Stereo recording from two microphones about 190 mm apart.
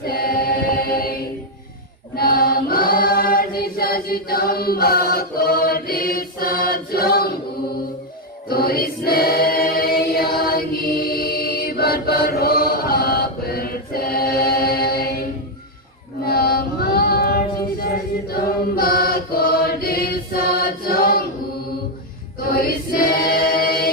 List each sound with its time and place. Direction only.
0.0 s a capella: 50° left (ahead or behind)
2.1 s choir: 55° left (ahead or behind)
8.4 s choir: 55° left (ahead or behind)
16.2 s female singing: 55° left (ahead or behind)
18.3 s choir: 50° left (ahead or behind)
22.4 s choir: 50° left (ahead or behind)